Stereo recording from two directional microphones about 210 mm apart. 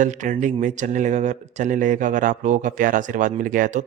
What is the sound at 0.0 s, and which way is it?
Speech, 35° right (ahead or behind).